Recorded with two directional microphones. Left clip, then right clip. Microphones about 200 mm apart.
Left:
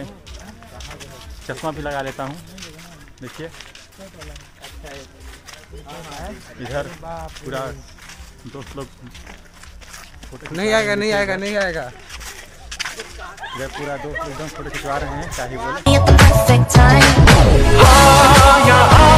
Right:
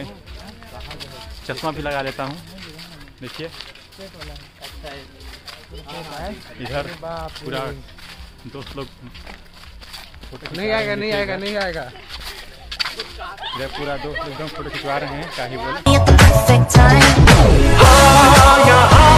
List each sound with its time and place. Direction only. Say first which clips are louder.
1.5 s speech: right 1 dB; centre (ahead or behind)
6.6 s speech: even; 10° left (ahead or behind)
7.0 s speech: right 2 dB; 55° right (ahead or behind)
7.4 s speech: left 1 dB; 10° left (ahead or behind)
8.8 s speech: right 1 dB; 15° left (ahead or behind)
10.5 s speech: left 3 dB; 60° left (ahead or behind)
12.7 s a sound: right 3 dB; 20° left (ahead or behind)
14.9 s speech: even; 15° left (ahead or behind)
15.5 s speech: left 2 dB; 15° right (ahead or behind)
15.8 s music: even; centre (ahead or behind)